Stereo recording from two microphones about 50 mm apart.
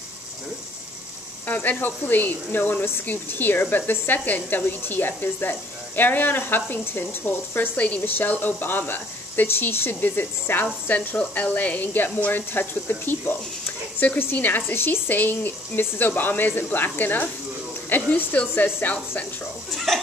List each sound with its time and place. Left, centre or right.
1.5 s a woman's voice: left
7.7 s a woman's voice: left
19.7 s chuckle: centre